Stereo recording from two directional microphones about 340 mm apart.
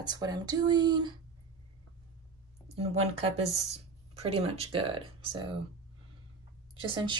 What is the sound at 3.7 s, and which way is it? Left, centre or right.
Speech, centre.